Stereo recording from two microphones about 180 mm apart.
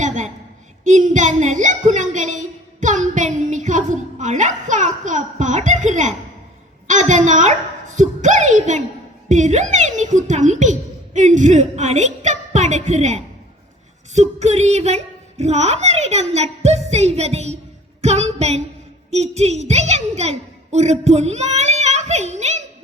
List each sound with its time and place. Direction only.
0.9 s a woman's voice: 45° right (ahead or behind)
14.1 s a sound: 40° right (ahead or behind)
20.7 s a child's voice: 40° right (ahead or behind)